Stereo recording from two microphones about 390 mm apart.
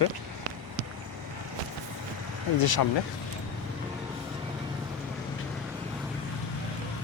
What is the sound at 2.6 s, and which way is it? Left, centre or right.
Speech, left.